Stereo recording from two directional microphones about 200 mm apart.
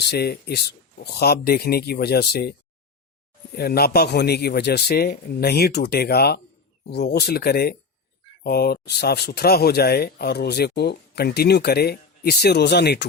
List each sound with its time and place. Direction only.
0.1 s speech: 55° left (ahead or behind)